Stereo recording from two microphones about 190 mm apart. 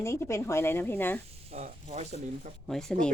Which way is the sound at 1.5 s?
35° right (ahead or behind).